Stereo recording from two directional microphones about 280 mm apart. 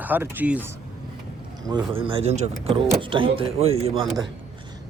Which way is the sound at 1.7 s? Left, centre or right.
Centre.